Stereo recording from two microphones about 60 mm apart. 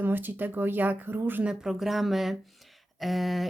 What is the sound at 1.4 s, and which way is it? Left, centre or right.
Speech, centre.